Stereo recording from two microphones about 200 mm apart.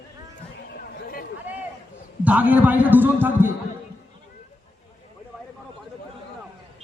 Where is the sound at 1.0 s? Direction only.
45° left (ahead or behind).